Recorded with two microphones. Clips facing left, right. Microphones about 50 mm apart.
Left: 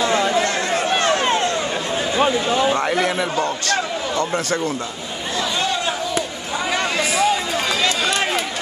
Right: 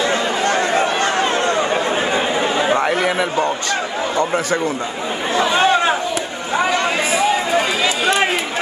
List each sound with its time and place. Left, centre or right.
0.0 s chatter: right
1.3 s a sound: right
2.4 s chatter: right
2.8 s a man's voice: centre
5.3 s chatter: right
6.8 s run: centre